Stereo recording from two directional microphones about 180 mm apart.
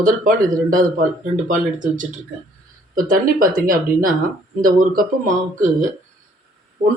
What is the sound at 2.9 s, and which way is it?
Speech, 50° right (ahead or behind).